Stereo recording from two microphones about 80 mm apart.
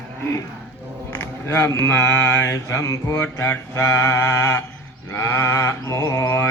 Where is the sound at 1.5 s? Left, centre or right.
Left.